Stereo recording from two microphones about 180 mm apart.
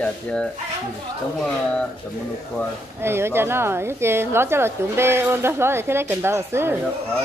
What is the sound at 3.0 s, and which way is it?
A woman's voice, 15° right (ahead or behind).